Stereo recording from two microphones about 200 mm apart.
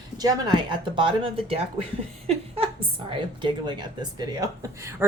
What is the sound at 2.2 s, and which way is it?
Laughter, 30° right (ahead or behind).